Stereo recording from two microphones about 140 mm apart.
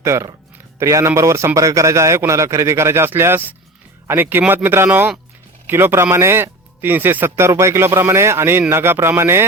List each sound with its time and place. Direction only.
0.0 s a man's voice: 20° right (ahead or behind)